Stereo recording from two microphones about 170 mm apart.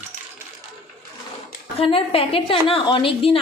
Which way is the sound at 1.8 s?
35° left (ahead or behind).